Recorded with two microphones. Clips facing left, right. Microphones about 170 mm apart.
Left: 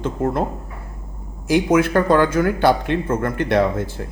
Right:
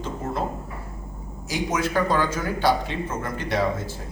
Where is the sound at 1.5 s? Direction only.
55° left (ahead or behind).